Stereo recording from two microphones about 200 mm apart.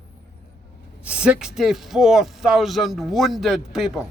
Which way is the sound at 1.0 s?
5° right (ahead or behind).